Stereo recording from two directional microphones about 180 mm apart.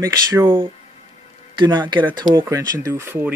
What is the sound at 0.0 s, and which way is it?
Speech, 20° right (ahead or behind).